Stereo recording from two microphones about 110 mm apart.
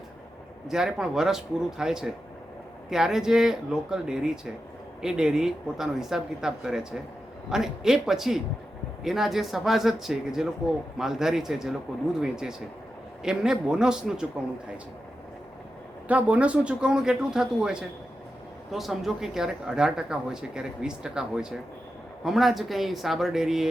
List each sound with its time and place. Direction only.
0.7 s speech: 5° right (ahead or behind)
16.0 s speech: 10° right (ahead or behind)